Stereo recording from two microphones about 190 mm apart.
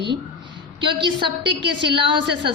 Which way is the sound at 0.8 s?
25° right (ahead or behind).